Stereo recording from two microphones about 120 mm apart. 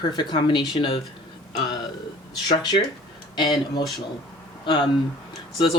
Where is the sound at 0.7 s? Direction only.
50° left (ahead or behind).